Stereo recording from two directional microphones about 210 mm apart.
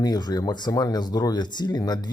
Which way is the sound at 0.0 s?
20° left (ahead or behind).